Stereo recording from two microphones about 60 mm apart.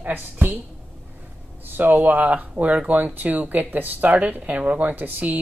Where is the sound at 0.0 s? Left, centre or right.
Right.